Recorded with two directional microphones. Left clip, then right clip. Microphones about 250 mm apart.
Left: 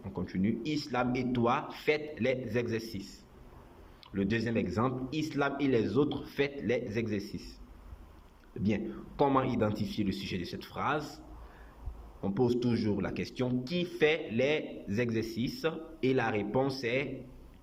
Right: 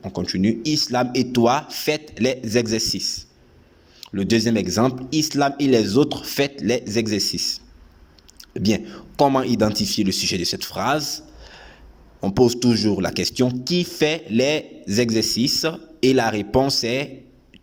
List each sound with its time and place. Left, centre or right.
0.0 s speech: right
12.2 s speech: right